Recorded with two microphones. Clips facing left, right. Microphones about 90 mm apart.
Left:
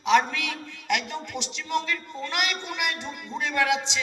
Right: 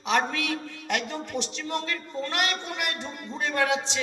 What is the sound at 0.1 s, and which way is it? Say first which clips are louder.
A man's voice: left 3 dB; 40° right (ahead or behind).